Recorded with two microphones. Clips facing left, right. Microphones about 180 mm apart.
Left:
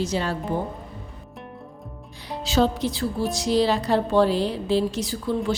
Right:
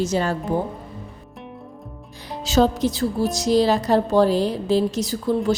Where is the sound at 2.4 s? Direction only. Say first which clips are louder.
Right 3 dB; 45° right (ahead or behind).